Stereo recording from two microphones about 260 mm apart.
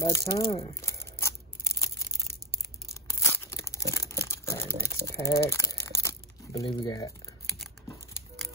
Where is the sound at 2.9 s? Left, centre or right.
Centre.